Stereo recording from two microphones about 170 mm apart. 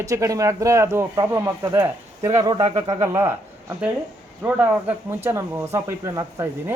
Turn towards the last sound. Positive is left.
turn(degrees=-20)  # may be behind; listen again after turning